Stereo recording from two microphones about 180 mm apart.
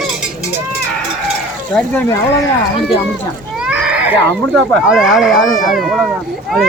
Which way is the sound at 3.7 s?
5° right (ahead or behind).